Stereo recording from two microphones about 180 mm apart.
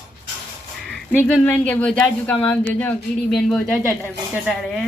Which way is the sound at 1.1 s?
5° left (ahead or behind).